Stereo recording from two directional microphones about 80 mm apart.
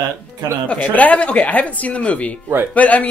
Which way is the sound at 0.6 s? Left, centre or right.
Centre.